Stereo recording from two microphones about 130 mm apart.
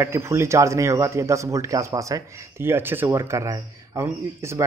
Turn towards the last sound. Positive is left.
turn(degrees=-25)  # may be behind; listen again after turning